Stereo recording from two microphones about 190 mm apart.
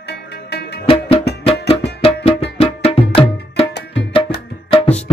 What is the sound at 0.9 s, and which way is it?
Music, 30° left (ahead or behind).